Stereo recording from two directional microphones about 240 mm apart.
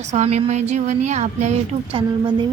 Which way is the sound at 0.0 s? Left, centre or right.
Right.